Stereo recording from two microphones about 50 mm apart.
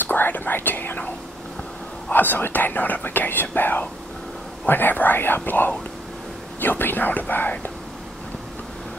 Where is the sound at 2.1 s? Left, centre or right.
Left.